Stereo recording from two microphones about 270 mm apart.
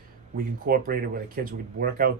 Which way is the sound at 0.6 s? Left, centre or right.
Right.